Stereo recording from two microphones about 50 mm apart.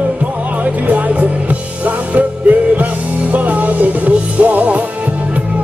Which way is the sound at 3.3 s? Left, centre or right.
Right.